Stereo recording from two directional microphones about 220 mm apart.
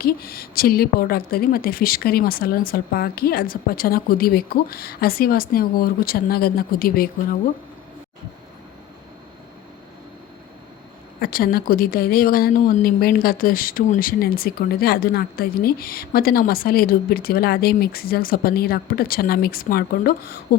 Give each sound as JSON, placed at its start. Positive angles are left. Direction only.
{"t": 0.0, "sound": "a woman's voice", "side_deg": 45}
{"t": 11.2, "sound": "a woman's voice", "side_deg": 40}